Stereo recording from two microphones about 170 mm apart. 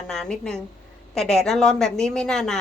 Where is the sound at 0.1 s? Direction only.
5° left (ahead or behind).